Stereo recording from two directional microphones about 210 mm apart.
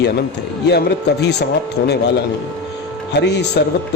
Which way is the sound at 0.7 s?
50° left (ahead or behind).